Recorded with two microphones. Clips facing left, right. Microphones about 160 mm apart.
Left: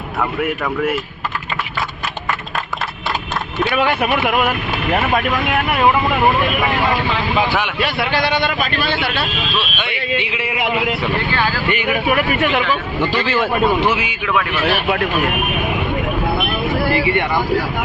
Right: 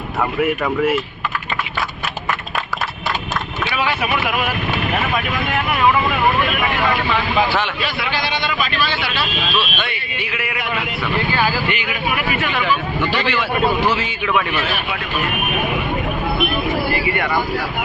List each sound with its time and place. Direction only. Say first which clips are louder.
0.2 s speech: right 2 dB; 5° right (ahead or behind)
3.7 s a man's voice: left 4 dB; 55° left (ahead or behind)
7.8 s a man's voice: left 4 dB; 60° left (ahead or behind)
10.2 s a man's voice: left 3 dB; 25° left (ahead or behind)
11.3 s speech: right 1 dB; 10° right (ahead or behind)
11.9 s speech: left 5 dB; 45° left (ahead or behind)
13.8 s a man's voice: left 1 dB; 15° left (ahead or behind)
16.9 s a man's voice: left 4 dB; 30° left (ahead or behind)